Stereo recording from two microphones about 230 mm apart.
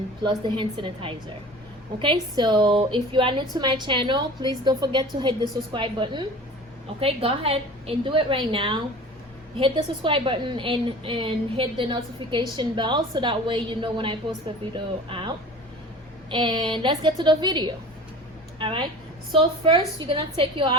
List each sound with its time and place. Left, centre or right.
0.2 s a woman's voice: right